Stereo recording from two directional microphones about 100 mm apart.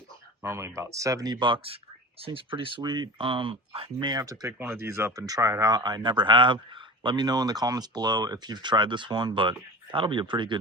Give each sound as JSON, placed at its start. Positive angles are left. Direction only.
{"t": 0.4, "sound": "speech", "side_deg": -30}
{"t": 3.2, "sound": "speech", "side_deg": -65}
{"t": 4.0, "sound": "speech", "side_deg": -40}
{"t": 4.6, "sound": "speech", "side_deg": -25}